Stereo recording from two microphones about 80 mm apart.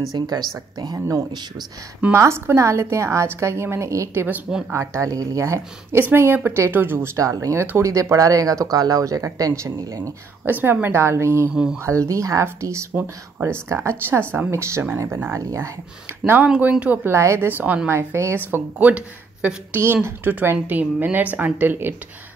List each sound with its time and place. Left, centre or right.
0.1 s speech: right
0.9 s a woman's voice: right
4.5 s speech: centre
4.7 s a woman's voice: right
9.5 s a woman's voice: right
11.5 s speech: centre
11.8 s a woman's voice: right
16.4 s a woman's voice: centre
17.1 s a woman's voice: right
17.5 s a woman's voice: right
17.8 s a woman's voice: right
18.5 s a woman's voice: right
19.8 s a woman's voice: right